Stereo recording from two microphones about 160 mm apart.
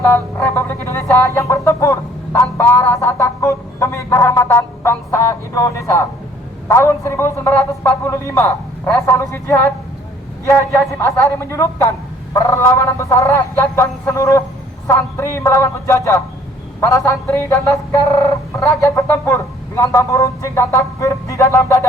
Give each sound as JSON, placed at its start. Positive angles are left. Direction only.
{"t": 0.0, "sound": "speech", "side_deg": 15}